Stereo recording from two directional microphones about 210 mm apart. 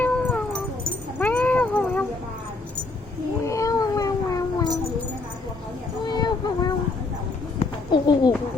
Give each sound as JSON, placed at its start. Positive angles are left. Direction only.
{"t": 0.0, "sound": "dog", "side_deg": 5}
{"t": 1.2, "sound": "cat", "side_deg": 5}
{"t": 3.4, "sound": "cat", "side_deg": 15}
{"t": 6.1, "sound": "a sound", "side_deg": 20}